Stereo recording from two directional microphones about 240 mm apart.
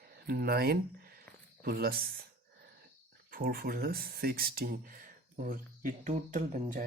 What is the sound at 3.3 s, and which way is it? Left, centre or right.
Speech, right.